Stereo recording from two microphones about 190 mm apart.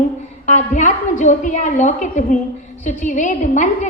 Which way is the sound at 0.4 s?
40° left (ahead or behind).